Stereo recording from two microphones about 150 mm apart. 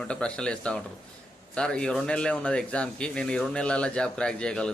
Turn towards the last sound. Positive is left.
turn(degrees=5)  # may be behind; listen again after turning